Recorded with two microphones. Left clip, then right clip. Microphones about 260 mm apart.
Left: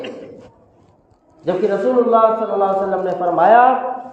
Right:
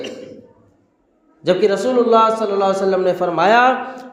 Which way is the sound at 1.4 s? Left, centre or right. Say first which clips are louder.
Right 2 dB; right.